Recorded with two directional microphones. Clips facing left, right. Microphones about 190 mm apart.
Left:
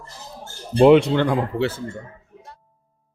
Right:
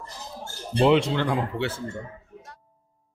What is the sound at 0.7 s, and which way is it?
Speech, 55° left (ahead or behind).